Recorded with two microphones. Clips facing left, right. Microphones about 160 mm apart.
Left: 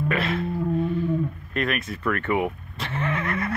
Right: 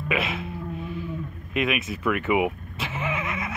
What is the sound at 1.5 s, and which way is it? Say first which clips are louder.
Vehicle: right 5 dB; 5° right (ahead or behind).